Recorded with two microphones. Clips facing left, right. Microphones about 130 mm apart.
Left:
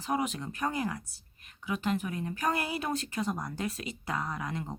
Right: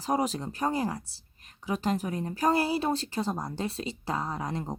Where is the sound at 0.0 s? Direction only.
35° right (ahead or behind).